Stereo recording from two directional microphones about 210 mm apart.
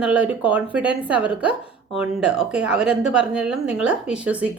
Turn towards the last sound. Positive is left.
turn(degrees=-5)  # may be behind; listen again after turning